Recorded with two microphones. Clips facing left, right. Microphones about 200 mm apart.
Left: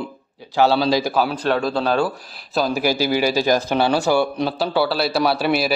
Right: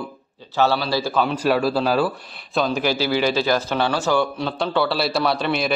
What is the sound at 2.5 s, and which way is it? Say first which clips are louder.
A man's voice: left 1 dB; 5° left (ahead or behind).